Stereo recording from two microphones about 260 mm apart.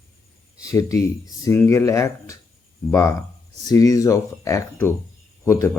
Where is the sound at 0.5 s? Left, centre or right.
Centre.